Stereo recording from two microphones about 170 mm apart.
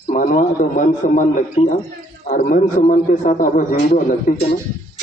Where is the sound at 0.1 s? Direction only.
50° left (ahead or behind).